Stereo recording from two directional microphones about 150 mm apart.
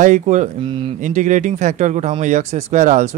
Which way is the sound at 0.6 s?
35° right (ahead or behind).